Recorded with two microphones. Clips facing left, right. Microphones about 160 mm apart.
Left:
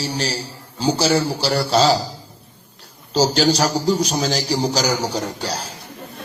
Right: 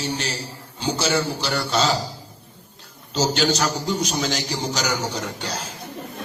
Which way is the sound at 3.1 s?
35° left (ahead or behind).